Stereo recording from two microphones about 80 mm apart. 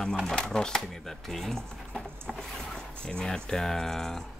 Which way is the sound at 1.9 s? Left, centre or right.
Centre.